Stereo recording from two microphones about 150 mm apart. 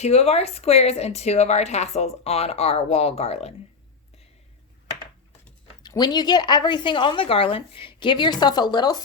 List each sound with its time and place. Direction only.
0.0 s speech: 45° left (ahead or behind)
5.8 s a woman's voice: 25° left (ahead or behind)